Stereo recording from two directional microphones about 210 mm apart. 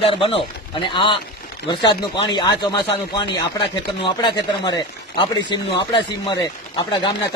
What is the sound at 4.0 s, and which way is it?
Speech, 20° left (ahead or behind).